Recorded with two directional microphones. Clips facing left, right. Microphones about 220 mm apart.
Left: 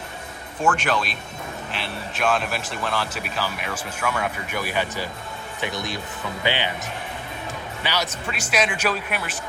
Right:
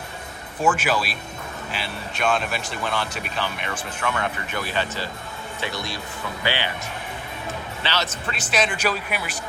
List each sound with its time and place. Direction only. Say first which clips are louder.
0.6 s speech: right 1 dB; 5° right (ahead or behind); by 6.7 s 20° left (ahead or behind)
7.8 s speech: left 1 dB; 15° left (ahead or behind)
8.9 s speech: even; 5° right (ahead or behind)